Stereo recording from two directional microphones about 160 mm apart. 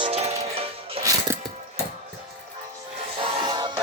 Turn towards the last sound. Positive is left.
turn(degrees=-25)  # may be behind; listen again after turning